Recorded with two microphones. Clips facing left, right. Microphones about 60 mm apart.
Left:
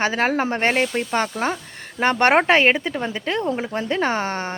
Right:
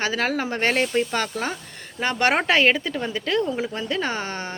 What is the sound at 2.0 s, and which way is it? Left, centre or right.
Speech, left.